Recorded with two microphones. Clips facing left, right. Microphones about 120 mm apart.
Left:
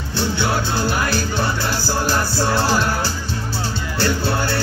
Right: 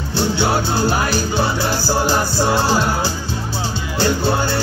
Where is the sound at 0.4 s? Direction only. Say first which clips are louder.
Right 3 dB; 30° right (ahead or behind).